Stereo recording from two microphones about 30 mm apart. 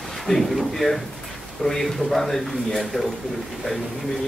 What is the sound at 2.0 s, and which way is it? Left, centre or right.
Speech, centre.